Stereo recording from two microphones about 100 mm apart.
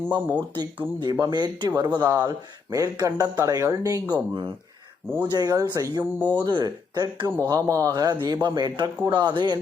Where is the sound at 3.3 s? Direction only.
30° right (ahead or behind).